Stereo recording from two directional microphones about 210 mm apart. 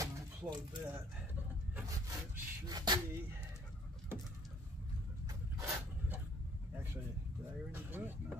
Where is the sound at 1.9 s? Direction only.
15° right (ahead or behind).